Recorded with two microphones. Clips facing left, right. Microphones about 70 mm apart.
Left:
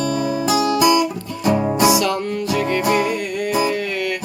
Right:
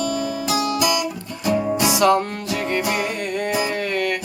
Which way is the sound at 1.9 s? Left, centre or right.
Right.